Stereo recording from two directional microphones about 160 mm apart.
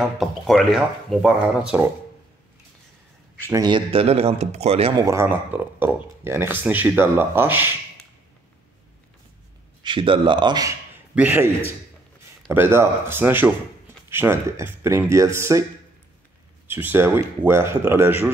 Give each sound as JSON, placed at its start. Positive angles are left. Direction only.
{"t": 0.2, "sound": "speech", "side_deg": 0}
{"t": 3.4, "sound": "speech", "side_deg": -25}
{"t": 4.9, "sound": "speech", "side_deg": -20}
{"t": 9.8, "sound": "speech", "side_deg": -30}
{"t": 11.1, "sound": "speech", "side_deg": -10}
{"t": 12.5, "sound": "speech", "side_deg": -15}
{"t": 16.6, "sound": "speech", "side_deg": -10}